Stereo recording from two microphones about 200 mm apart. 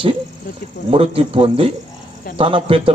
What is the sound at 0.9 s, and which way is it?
A man's voice, 30° right (ahead or behind).